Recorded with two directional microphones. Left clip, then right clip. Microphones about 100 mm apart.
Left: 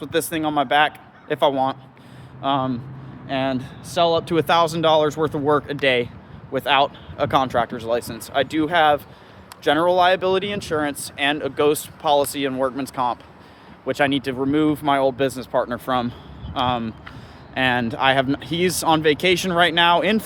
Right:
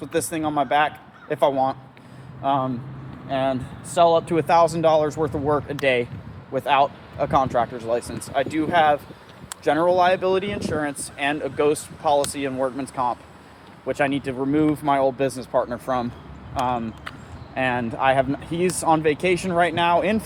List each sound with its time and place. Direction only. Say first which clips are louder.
0.0 s speech: left 2 dB; 50° left (ahead or behind)
2.4 s speech: left 1 dB; 70° left (ahead or behind)
4.4 s speech: even; 45° left (ahead or behind)
6.5 s speech: left 1 dB; 50° left (ahead or behind)
9.6 s speech: left 2 dB; 60° left (ahead or behind)
13.8 s speech: left 2 dB; 85° left; by 16.0 s 60° left (ahead or behind)
16.6 s speech: left 2 dB; 70° left (ahead or behind)
17.5 s speech: left 3 dB; 90° left; by 20.2 s 55° left (ahead or behind)